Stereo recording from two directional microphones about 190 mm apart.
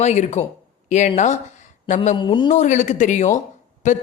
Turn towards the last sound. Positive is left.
turn(degrees=40)  # may be behind; listen again after turning